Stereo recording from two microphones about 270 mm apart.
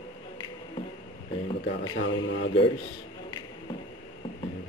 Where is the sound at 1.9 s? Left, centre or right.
Left.